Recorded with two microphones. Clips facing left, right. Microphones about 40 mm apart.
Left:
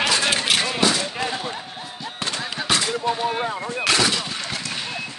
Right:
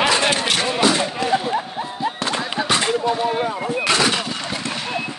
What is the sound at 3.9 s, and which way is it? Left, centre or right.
Gunshot, right.